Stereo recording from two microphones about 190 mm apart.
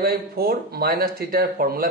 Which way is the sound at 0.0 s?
55° right (ahead or behind).